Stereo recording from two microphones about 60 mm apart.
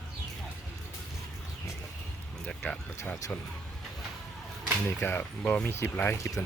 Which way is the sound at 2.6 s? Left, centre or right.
Left.